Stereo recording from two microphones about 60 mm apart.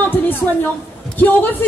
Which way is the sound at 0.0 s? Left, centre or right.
Left.